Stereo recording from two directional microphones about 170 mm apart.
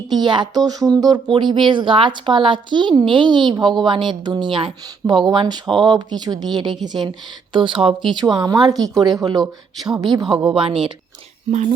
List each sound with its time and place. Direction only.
0.1 s speech: 25° right (ahead or behind)